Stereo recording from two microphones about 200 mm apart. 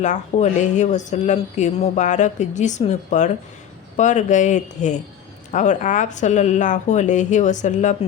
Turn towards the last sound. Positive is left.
turn(degrees=35)  # may be behind; listen again after turning